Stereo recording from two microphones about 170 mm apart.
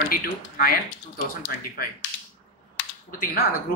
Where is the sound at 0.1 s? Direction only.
60° left (ahead or behind).